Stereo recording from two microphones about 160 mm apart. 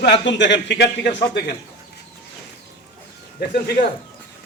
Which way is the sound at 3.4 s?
85° left.